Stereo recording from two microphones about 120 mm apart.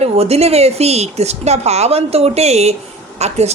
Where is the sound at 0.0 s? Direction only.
60° right (ahead or behind).